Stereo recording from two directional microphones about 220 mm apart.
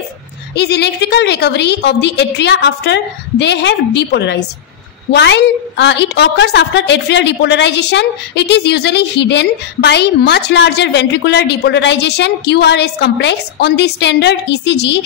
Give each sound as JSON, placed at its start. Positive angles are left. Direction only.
{"t": 0.6, "sound": "a woman's voice", "side_deg": 50}